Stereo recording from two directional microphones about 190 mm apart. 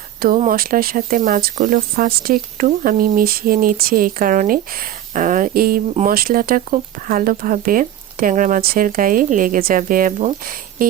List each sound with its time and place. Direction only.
0.5 s speech: 50° right (ahead or behind)